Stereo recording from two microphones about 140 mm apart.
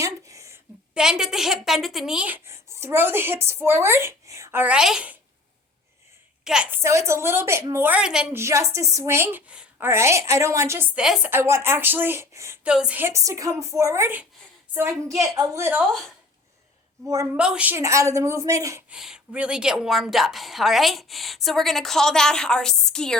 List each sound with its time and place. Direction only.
0.0 s a sound: 20° right (ahead or behind)
0.9 s speech: 5° right (ahead or behind)
6.4 s speech: 5° right (ahead or behind)
7.9 s speech: 5° right (ahead or behind)
8.4 s a woman's voice: 20° right (ahead or behind)
11.0 s a woman's voice: 5° right (ahead or behind)
11.3 s speech: 20° right (ahead or behind)
12.6 s a woman's voice: 5° right (ahead or behind)
17.3 s a woman's voice: 10° right (ahead or behind)
18.9 s a woman's voice: 5° right (ahead or behind)